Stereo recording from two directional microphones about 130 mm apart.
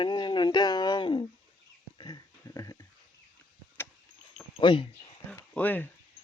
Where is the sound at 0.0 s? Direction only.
35° left (ahead or behind).